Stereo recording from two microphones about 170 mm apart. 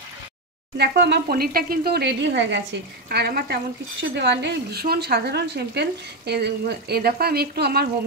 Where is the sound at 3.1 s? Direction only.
70° right (ahead or behind).